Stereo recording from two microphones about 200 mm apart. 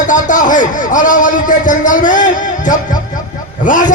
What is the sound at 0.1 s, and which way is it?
A man's voice, 40° left (ahead or behind).